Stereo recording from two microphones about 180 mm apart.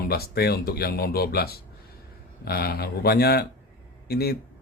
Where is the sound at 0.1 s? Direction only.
60° left (ahead or behind).